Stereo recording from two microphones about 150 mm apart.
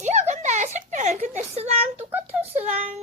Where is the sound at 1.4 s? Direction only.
50° right (ahead or behind).